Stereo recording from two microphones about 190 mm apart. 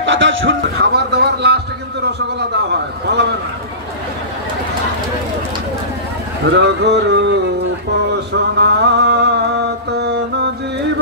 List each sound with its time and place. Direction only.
0.0 s speech: 80° right; by 1.6 s 60° right (ahead or behind)
3.1 s speech: 60° right (ahead or behind)
6.5 s speech: 65° right (ahead or behind)
8.5 s music: 60° right (ahead or behind)
9.9 s mantra: 65° right (ahead or behind)